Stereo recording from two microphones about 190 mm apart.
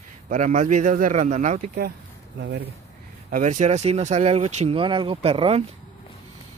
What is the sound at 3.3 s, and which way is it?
Speech, 40° right (ahead or behind).